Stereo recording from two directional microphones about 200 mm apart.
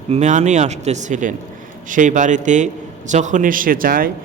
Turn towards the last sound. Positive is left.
turn(degrees=-45)  # may be behind; listen again after turning